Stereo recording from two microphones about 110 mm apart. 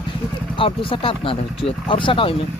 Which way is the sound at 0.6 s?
55° left (ahead or behind).